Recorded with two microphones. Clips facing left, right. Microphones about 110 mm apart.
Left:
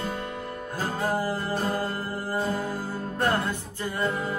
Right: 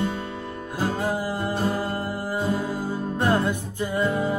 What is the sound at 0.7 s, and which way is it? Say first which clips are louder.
Music: right 2 dB; 15° right (ahead or behind).